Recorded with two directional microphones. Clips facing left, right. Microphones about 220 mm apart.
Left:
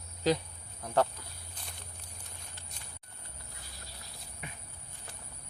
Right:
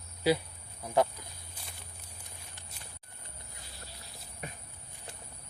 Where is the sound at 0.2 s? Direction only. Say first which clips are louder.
Right 1 dB; 10° right (ahead or behind).